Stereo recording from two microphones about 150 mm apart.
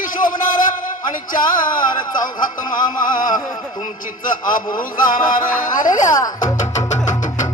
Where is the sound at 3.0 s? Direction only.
65° left (ahead or behind).